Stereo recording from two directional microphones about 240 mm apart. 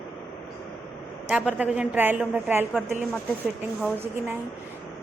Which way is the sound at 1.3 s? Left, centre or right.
Centre.